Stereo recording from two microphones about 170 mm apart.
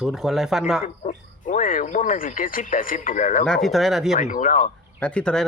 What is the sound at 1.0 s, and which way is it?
Speech, 50° left (ahead or behind).